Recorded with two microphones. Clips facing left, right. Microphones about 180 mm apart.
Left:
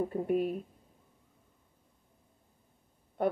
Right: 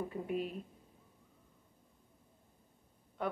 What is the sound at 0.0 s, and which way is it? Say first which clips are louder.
Speech: left 8 dB; 45° left (ahead or behind).